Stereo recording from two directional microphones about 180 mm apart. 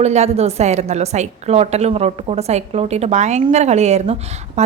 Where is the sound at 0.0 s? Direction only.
35° right (ahead or behind).